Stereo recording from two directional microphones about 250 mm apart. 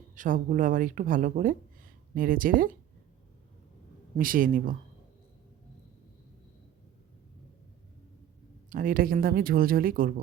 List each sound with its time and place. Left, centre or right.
0.2 s speech: right
4.1 s speech: right
8.7 s speech: right